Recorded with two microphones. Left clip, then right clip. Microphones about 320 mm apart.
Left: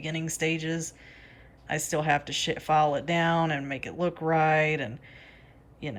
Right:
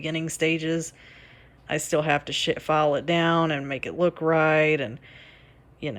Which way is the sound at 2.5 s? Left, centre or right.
Centre.